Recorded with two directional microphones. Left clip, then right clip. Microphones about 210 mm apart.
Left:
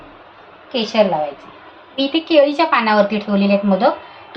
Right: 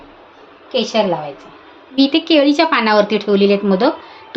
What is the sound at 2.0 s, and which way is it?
A woman's voice, 50° right (ahead or behind).